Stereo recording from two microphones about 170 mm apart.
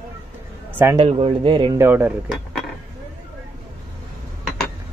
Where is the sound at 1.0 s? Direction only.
35° right (ahead or behind).